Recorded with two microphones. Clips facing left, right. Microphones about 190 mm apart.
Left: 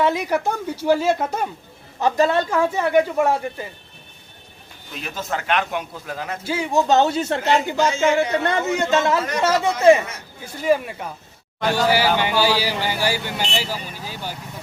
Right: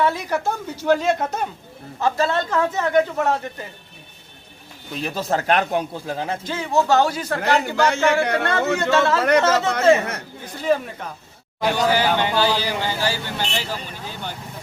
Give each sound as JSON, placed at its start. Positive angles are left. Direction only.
{"t": 0.0, "sound": "a man's voice", "side_deg": 15}
{"t": 5.0, "sound": "speech", "side_deg": -35}
{"t": 6.4, "sound": "a man's voice", "side_deg": 10}
{"t": 7.8, "sound": "a man's voice", "side_deg": -65}
{"t": 8.7, "sound": "a man's voice", "side_deg": 15}
{"t": 10.0, "sound": "a man's voice", "side_deg": -60}
{"t": 10.4, "sound": "a man's voice", "side_deg": 10}